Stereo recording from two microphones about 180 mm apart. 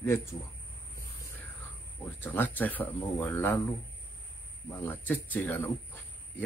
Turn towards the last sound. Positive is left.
turn(degrees=10)  # may be behind; listen again after turning